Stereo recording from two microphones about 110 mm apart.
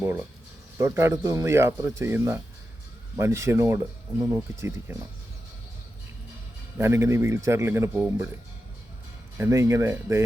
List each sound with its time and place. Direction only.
0.0 s speech: 25° right (ahead or behind)
6.7 s speech: 25° right (ahead or behind)
9.4 s speech: 25° right (ahead or behind)